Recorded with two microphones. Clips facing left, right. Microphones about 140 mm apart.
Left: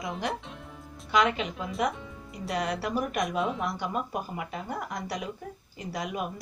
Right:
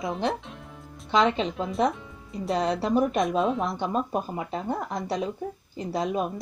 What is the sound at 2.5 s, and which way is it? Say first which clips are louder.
A woman's voice: right 5 dB; 25° right (ahead or behind).